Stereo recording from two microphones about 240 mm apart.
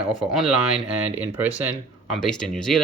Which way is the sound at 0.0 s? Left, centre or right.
Centre.